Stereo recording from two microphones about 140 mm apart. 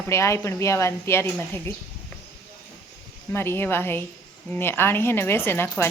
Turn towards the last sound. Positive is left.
turn(degrees=15)  # may be behind; listen again after turning